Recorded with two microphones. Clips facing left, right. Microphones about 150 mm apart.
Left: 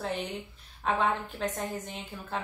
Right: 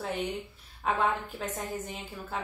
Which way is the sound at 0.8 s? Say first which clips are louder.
Even; 5° right (ahead or behind).